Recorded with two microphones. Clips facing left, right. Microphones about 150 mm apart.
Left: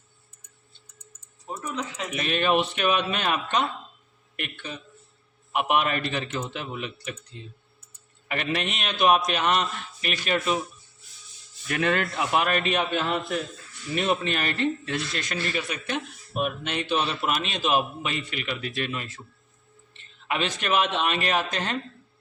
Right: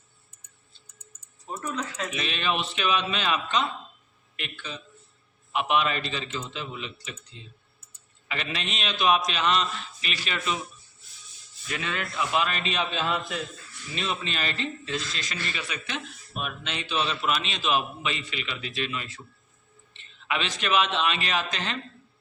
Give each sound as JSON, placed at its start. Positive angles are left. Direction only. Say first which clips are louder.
{"t": 1.5, "sound": "speech", "louder": "even", "side_deg": 15}
{"t": 2.1, "sound": "speech", "louder": "left 7 dB", "side_deg": 50}
{"t": 5.5, "sound": "a man's voice", "louder": "left 1 dB", "side_deg": 55}
{"t": 11.7, "sound": "a man's voice", "louder": "left 7 dB", "side_deg": 60}